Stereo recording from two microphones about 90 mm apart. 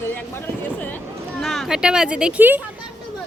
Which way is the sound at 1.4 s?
Centre (ahead or behind).